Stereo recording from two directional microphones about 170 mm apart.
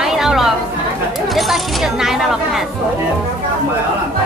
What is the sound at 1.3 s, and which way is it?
Speech, centre (ahead or behind).